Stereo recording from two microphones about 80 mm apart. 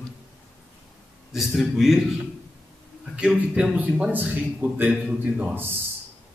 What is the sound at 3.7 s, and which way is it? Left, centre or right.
A man's voice, centre.